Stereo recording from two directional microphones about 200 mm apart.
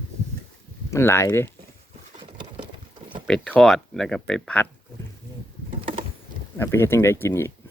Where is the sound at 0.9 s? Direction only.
15° left (ahead or behind).